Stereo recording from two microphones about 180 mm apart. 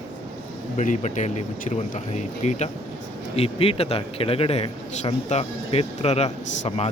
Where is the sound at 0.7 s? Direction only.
45° left (ahead or behind).